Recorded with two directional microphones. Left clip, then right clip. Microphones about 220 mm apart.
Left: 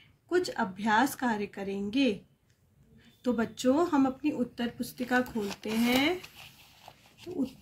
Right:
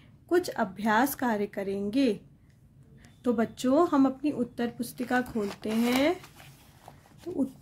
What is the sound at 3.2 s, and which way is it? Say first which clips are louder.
Speech: right 3 dB; 50° right (ahead or behind).